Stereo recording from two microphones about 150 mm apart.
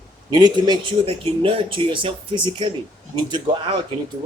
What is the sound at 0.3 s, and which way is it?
Speech, 30° right (ahead or behind).